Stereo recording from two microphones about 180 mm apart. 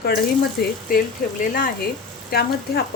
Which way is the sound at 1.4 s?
50° left (ahead or behind).